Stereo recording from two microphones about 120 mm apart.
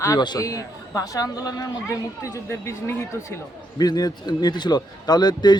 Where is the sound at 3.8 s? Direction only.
35° left (ahead or behind).